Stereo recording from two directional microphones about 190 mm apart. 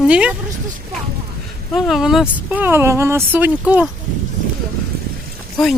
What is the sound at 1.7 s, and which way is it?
Speech, centre (ahead or behind).